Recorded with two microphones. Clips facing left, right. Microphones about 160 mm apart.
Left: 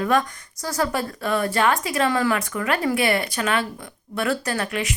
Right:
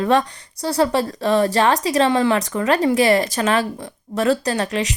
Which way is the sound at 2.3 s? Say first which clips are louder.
Right 5 dB; 35° right (ahead or behind).